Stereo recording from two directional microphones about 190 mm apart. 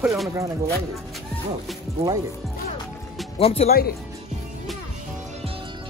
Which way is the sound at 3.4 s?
30° left (ahead or behind).